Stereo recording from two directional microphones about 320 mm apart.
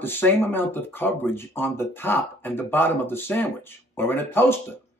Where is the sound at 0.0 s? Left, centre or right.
Centre.